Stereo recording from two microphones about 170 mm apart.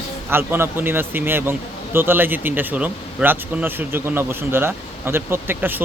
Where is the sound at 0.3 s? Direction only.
15° right (ahead or behind).